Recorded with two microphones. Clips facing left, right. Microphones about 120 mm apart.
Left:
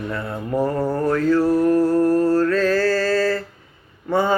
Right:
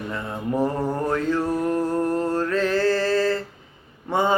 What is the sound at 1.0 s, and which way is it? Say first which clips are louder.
Mantra: left 7 dB; 20° right (ahead or behind).